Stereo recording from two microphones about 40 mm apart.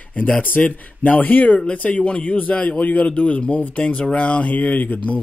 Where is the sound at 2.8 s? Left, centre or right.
Left.